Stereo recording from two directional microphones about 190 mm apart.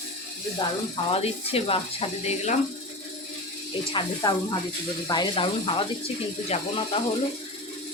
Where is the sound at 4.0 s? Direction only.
25° left (ahead or behind).